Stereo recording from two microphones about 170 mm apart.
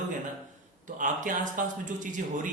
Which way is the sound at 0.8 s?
50° right (ahead or behind).